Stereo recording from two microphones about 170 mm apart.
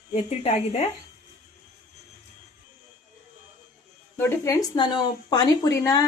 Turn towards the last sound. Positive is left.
turn(degrees=20)  # may be behind; listen again after turning